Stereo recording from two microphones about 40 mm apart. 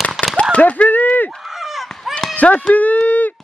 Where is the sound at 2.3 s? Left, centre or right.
Left.